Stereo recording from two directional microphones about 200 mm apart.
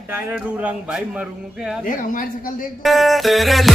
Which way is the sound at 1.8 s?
45° left (ahead or behind).